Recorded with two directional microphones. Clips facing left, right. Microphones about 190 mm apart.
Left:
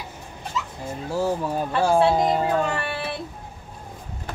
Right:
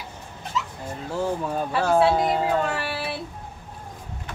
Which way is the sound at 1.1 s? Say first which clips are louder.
Left 2 dB; 10° left (ahead or behind).